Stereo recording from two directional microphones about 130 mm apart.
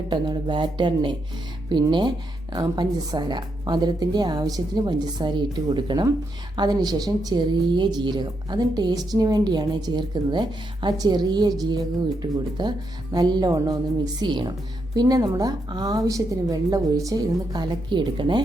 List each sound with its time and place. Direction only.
0.1 s a woman's voice: 35° right (ahead or behind)